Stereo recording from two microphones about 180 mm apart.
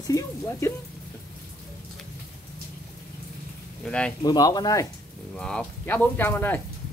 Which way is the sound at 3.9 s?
5° left (ahead or behind).